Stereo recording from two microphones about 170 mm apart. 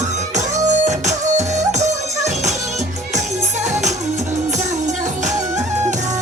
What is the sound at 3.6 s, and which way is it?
Music, 45° right (ahead or behind).